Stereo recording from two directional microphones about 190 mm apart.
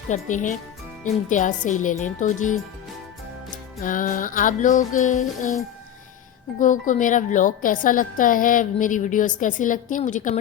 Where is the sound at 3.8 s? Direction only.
45° left (ahead or behind).